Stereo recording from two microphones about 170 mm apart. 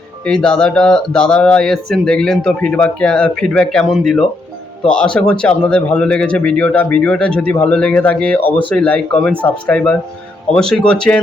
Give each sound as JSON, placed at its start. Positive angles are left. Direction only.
{"t": 0.3, "sound": "speech", "side_deg": 5}